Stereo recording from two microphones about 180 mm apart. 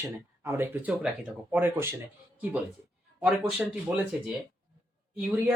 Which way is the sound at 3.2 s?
5° right (ahead or behind).